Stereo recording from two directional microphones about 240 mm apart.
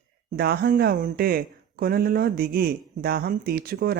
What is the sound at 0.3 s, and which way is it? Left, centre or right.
Speech, right.